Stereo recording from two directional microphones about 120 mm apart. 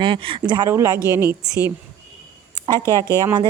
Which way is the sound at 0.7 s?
25° right (ahead or behind).